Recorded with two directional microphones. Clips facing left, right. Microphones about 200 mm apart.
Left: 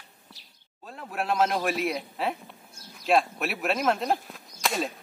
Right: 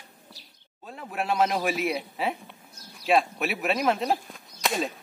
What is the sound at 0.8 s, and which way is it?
Speech, centre (ahead or behind).